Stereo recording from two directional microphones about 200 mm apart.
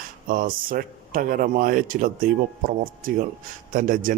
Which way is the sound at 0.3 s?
45° right (ahead or behind).